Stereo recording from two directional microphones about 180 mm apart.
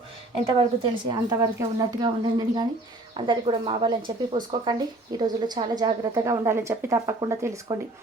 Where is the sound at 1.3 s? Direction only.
20° right (ahead or behind).